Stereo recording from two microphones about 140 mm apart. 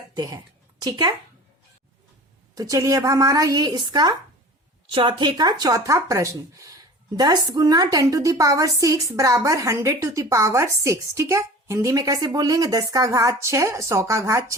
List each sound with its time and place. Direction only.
0.1 s a woman's voice: 30° right (ahead or behind)
2.6 s a woman's voice: 25° right (ahead or behind)